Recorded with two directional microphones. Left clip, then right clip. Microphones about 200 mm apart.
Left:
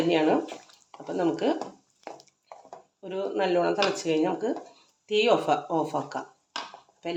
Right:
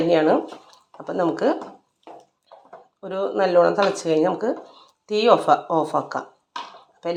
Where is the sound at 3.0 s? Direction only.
15° right (ahead or behind).